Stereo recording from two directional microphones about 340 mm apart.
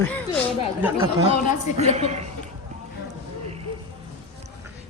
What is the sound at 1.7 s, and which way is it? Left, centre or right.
Speech, centre.